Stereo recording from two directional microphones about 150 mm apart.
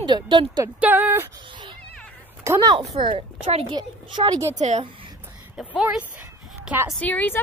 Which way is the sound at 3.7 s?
30° right (ahead or behind).